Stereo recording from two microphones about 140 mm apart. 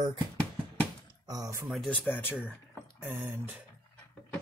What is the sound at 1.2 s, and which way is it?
Speech, 25° right (ahead or behind).